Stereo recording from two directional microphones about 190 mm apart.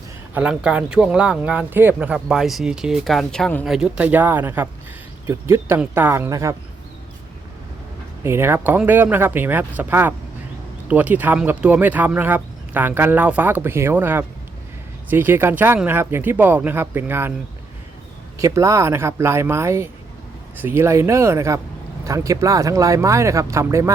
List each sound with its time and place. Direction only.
0.3 s speech: 5° right (ahead or behind)
8.2 s speech: 15° right (ahead or behind)
18.3 s speech: 15° right (ahead or behind)